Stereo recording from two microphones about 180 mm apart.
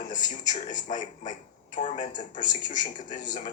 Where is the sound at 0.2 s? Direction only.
20° left (ahead or behind).